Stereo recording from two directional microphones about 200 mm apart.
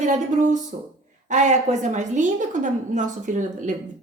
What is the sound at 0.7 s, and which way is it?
A woman's voice, 35° right (ahead or behind).